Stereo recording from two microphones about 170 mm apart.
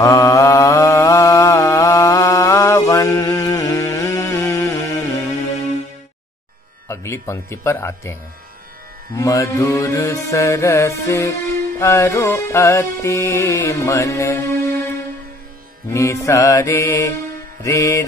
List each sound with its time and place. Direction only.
0.0 s mantra: 20° left (ahead or behind)
6.9 s music: 15° left (ahead or behind)